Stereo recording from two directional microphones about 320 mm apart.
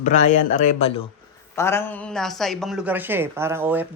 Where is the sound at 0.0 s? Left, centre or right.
Left.